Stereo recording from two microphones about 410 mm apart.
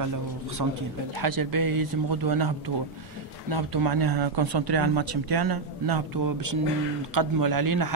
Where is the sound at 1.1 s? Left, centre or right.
Right.